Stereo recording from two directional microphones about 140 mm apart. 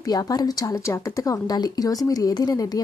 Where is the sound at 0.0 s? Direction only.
25° left (ahead or behind).